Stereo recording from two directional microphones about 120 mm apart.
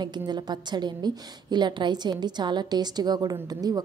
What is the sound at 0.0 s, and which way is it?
A woman's voice, 35° right (ahead or behind).